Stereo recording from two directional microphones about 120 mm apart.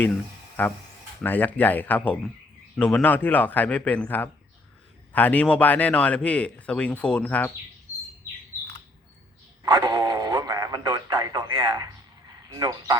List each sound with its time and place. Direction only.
0.6 s a man's voice: 15° left (ahead or behind)
9.6 s radio: 30° right (ahead or behind)
12.5 s speech: 30° right (ahead or behind)